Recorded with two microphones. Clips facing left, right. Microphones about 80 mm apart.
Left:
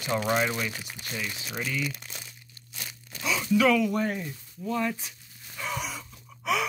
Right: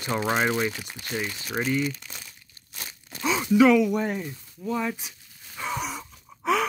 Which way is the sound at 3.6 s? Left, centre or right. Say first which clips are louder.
Right 4 dB; centre.